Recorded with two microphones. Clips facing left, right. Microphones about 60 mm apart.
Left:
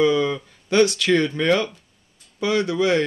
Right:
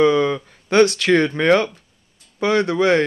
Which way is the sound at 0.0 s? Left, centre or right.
Right.